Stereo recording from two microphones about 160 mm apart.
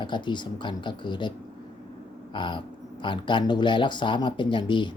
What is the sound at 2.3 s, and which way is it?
Speech, 30° left (ahead or behind).